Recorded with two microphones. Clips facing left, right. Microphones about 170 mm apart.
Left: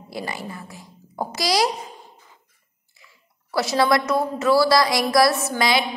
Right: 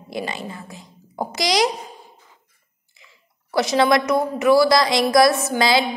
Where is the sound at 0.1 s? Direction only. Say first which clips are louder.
Right 3 dB; 20° right (ahead or behind).